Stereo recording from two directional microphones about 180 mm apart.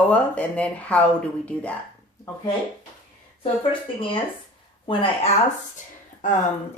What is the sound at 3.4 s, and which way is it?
Speech, 30° left (ahead or behind).